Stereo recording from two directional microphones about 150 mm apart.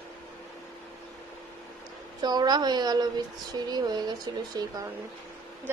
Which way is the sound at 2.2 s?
30° right (ahead or behind).